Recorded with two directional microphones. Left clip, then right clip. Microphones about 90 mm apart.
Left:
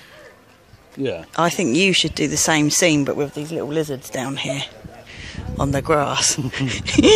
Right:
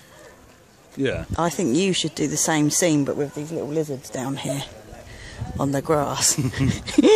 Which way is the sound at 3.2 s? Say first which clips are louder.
Left 3 dB; 40° left (ahead or behind).